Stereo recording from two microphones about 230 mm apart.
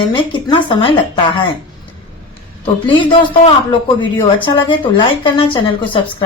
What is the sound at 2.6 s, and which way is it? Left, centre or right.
Speech, left.